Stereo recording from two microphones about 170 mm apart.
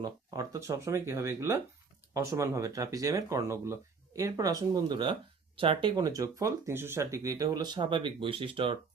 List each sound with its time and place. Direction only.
0.0 s speech: 20° right (ahead or behind)